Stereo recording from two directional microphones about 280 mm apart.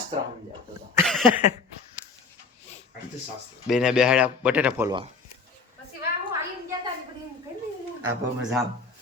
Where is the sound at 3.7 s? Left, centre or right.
Centre.